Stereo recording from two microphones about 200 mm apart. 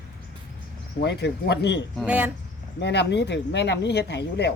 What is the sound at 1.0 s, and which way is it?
Speech, 55° left (ahead or behind).